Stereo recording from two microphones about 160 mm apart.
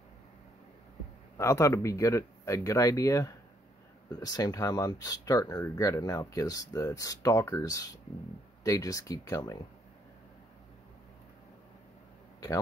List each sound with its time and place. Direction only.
1.4 s speech: 15° left (ahead or behind)